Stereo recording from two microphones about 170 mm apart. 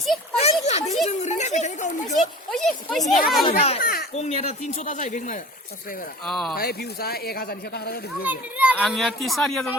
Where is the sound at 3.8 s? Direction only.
60° left (ahead or behind).